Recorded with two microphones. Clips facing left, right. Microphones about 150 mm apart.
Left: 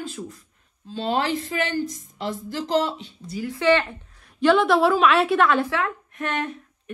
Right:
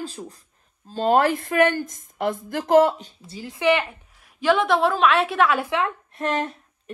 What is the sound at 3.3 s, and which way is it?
Speech, 25° right (ahead or behind).